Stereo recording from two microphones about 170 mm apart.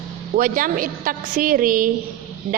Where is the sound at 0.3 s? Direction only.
55° right (ahead or behind).